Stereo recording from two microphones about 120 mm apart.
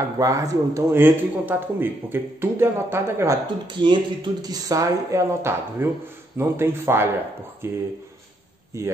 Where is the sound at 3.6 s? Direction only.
40° right (ahead or behind).